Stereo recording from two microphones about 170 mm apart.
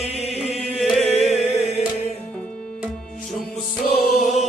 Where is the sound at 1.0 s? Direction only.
40° left (ahead or behind).